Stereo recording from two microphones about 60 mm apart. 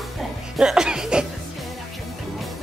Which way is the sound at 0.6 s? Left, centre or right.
Centre.